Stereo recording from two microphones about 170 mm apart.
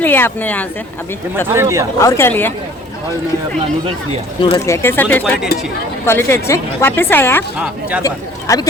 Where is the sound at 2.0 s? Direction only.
15° left (ahead or behind).